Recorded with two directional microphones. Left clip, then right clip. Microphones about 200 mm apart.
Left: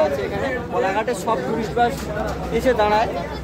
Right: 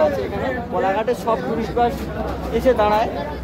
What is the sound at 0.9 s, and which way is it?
Speech, centre (ahead or behind).